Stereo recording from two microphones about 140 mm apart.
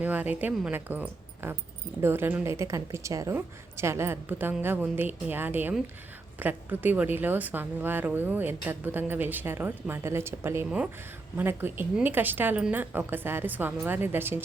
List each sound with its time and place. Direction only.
0.0 s a woman's voice: 10° right (ahead or behind)